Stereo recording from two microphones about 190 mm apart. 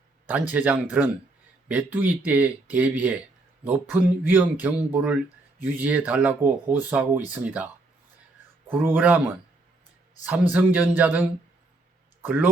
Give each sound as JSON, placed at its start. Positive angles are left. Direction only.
{"t": 0.3, "sound": "speech", "side_deg": -10}
{"t": 8.7, "sound": "speech", "side_deg": -10}
{"t": 10.5, "sound": "speech", "side_deg": -10}